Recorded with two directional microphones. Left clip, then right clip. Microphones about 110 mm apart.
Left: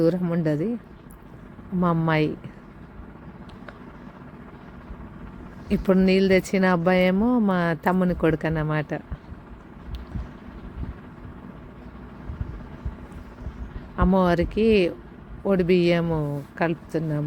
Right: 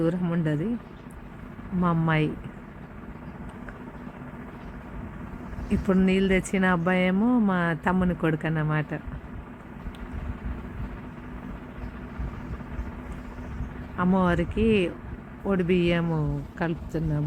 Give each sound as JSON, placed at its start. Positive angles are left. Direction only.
{"t": 0.0, "sound": "speech", "side_deg": 70}
{"t": 1.8, "sound": "speech", "side_deg": 90}
{"t": 5.6, "sound": "speech", "side_deg": 85}
{"t": 6.1, "sound": "speech", "side_deg": 65}
{"t": 13.9, "sound": "speech", "side_deg": 90}
{"t": 15.4, "sound": "speech", "side_deg": 65}
{"t": 16.6, "sound": "a woman's voice", "side_deg": 30}